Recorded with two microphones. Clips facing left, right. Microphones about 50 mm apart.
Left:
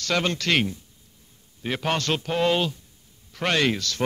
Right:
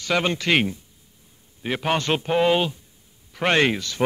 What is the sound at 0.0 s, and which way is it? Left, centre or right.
Speech, centre.